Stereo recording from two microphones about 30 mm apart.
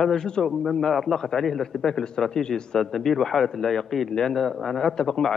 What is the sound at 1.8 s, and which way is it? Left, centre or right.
Speech, left.